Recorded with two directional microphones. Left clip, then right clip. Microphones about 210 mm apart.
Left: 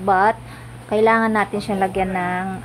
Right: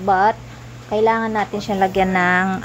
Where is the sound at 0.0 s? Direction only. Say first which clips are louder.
Right 1 dB; centre (ahead or behind).